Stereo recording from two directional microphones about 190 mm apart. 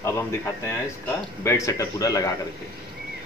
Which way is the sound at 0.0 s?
15° left (ahead or behind).